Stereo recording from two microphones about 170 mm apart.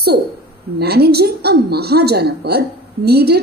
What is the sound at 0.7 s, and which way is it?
A woman's voice, 70° right (ahead or behind).